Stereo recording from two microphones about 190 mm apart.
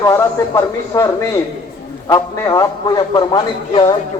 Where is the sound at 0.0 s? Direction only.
15° left (ahead or behind).